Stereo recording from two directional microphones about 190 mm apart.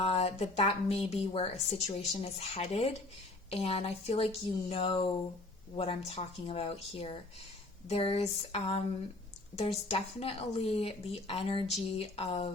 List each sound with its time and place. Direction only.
0.0 s speech: 30° left (ahead or behind)